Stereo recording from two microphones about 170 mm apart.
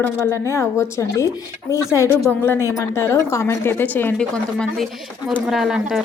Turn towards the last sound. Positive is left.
turn(degrees=-5)  # may be behind; listen again after turning